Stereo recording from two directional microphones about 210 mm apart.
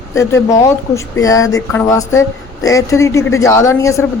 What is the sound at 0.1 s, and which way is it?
Speech, 15° left (ahead or behind).